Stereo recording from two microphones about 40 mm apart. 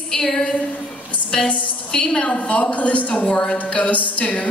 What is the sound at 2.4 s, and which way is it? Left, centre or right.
A woman's voice, left.